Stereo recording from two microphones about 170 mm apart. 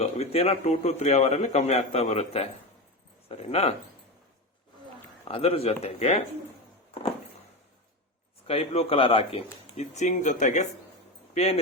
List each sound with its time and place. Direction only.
0.0 s a man's voice: 40° left (ahead or behind)
5.3 s a man's voice: 35° left (ahead or behind)
8.4 s a man's voice: 35° left (ahead or behind)